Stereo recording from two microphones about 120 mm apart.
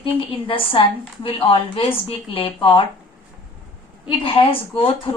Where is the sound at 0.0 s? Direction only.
45° left (ahead or behind).